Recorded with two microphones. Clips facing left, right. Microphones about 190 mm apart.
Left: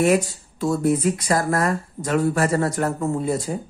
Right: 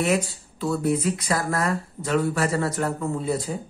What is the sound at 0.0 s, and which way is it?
Speech, 45° left (ahead or behind).